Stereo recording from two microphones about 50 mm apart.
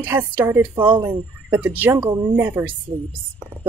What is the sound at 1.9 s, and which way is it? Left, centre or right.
Speech, right.